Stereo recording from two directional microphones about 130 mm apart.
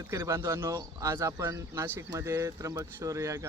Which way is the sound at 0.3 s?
20° right (ahead or behind).